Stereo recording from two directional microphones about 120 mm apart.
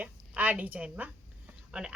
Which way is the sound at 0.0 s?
15° right (ahead or behind).